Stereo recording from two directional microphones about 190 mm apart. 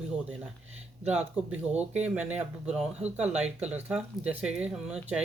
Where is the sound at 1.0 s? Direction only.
5° right (ahead or behind).